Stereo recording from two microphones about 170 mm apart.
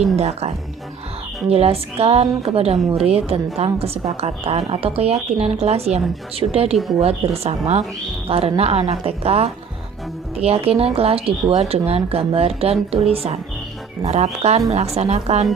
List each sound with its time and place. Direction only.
0.2 s a woman's voice: 40° right (ahead or behind)